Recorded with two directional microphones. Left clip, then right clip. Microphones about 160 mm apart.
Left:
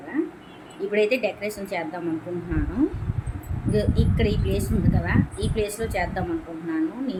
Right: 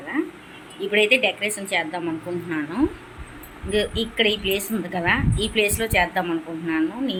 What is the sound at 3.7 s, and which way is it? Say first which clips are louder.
Speech: right 2 dB; 10° right (ahead or behind).